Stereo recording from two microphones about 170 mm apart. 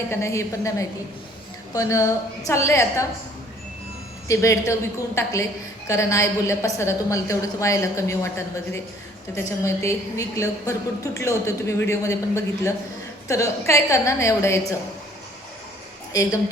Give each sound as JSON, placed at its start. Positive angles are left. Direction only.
{"t": 0.1, "sound": "a woman's voice", "side_deg": 15}
{"t": 4.3, "sound": "a woman's voice", "side_deg": 15}